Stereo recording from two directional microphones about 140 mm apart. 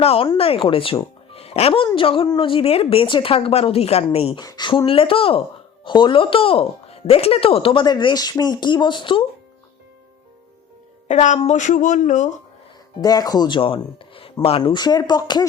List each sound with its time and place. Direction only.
0.0 s a woman's voice: 45° left (ahead or behind)
4.4 s speech: 30° left (ahead or behind)
11.1 s speech: 60° left (ahead or behind)
13.0 s speech: 30° left (ahead or behind)